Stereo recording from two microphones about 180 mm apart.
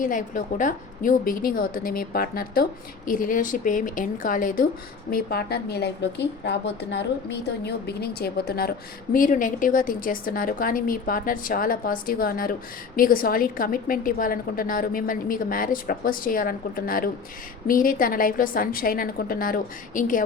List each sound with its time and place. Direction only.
0.0 s a woman's voice: 45° left (ahead or behind)
5.1 s a woman's voice: 60° left (ahead or behind)
9.1 s a woman's voice: 45° left (ahead or behind)